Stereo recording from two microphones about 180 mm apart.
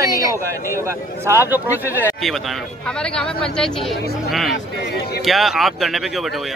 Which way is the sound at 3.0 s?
5° left (ahead or behind).